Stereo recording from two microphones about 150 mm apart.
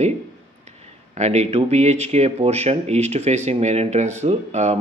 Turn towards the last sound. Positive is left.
turn(degrees=-50)  # may be behind; listen again after turning